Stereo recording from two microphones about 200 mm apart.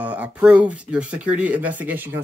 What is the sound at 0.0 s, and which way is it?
Speech, 5° right (ahead or behind).